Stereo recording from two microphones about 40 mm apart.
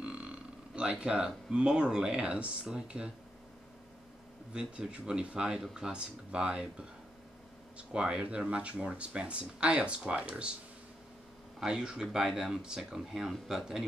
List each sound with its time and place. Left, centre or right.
0.0 s a sound: right
1.9 s speech: centre
4.6 s speech: right
7.7 s speech: right
11.6 s speech: centre